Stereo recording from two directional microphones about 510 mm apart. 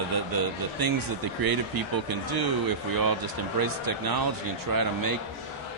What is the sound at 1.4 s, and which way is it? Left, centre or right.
A man's voice, right.